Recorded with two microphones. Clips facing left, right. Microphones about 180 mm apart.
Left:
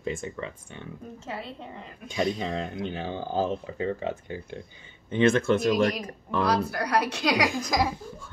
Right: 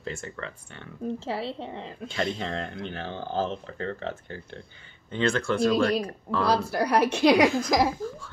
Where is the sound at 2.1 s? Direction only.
15° left (ahead or behind).